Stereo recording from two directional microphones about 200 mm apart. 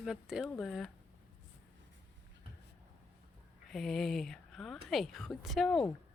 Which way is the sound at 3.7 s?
Centre (ahead or behind).